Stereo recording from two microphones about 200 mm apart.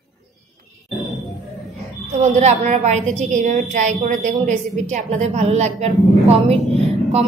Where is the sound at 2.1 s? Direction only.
35° right (ahead or behind).